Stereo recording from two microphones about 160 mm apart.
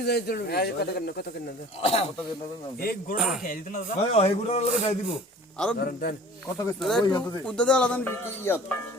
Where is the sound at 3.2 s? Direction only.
Centre (ahead or behind).